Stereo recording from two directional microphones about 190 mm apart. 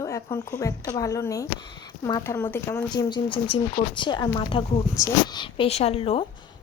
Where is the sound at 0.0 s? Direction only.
15° left (ahead or behind).